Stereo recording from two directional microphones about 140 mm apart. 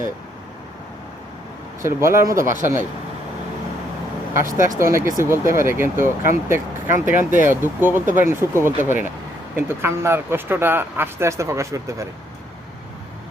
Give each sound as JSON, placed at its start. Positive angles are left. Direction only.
{"t": 1.8, "sound": "speech", "side_deg": -20}
{"t": 4.4, "sound": "speech", "side_deg": -20}